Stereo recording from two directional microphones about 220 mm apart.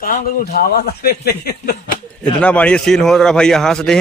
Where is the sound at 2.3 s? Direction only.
5° left (ahead or behind).